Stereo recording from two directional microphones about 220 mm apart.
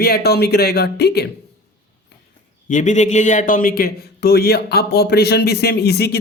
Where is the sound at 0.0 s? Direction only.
45° left (ahead or behind).